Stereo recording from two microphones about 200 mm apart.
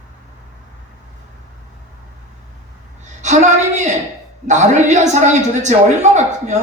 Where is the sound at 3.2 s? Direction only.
35° right (ahead or behind).